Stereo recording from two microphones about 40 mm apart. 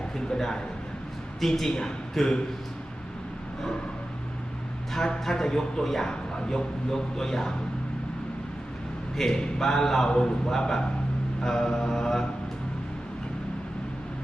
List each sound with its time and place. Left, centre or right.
0.3 s a man's voice: centre
5.2 s speech: centre
6.1 s speech: centre
9.1 s speech: centre
10.1 s a man's voice: centre